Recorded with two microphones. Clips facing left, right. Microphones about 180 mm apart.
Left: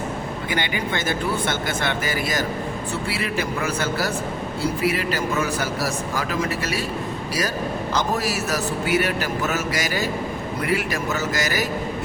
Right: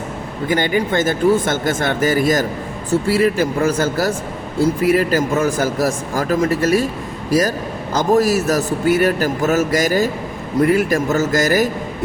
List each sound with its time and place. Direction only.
0.4 s speech: 40° right (ahead or behind)